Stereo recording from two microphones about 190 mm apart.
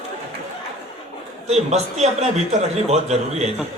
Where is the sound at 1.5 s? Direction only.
35° right (ahead or behind).